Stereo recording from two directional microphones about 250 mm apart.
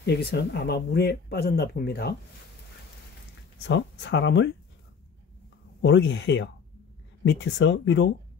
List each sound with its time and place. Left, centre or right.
0.0 s speech: left
3.6 s speech: left
5.8 s speech: left